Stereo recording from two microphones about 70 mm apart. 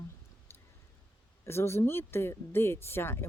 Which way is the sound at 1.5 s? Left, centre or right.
Left.